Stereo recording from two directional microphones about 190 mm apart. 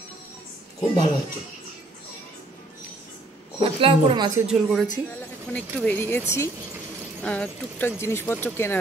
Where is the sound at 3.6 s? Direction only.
25° right (ahead or behind).